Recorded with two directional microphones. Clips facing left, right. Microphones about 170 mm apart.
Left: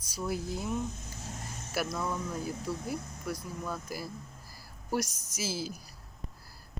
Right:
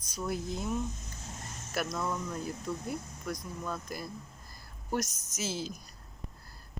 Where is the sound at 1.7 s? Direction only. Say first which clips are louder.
Even; 5° left (ahead or behind).